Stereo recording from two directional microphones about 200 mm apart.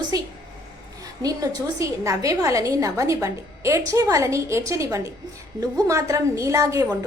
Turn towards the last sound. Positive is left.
turn(degrees=-15)  # may be behind; listen again after turning